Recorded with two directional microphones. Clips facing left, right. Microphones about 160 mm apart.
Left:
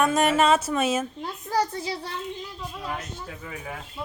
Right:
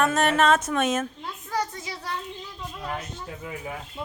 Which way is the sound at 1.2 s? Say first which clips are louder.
Left 4 dB; 35° left (ahead or behind).